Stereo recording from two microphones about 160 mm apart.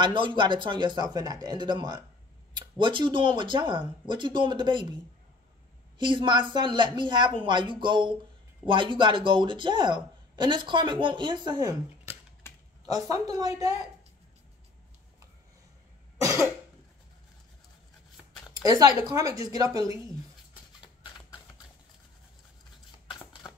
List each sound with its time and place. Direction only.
0.0 s speech: 30° right (ahead or behind)
5.9 s speech: 30° right (ahead or behind)
13.0 s speech: 20° right (ahead or behind)
16.2 s cough: 20° right (ahead or behind)
18.5 s speech: 20° right (ahead or behind)
23.4 s a sound: 15° left (ahead or behind)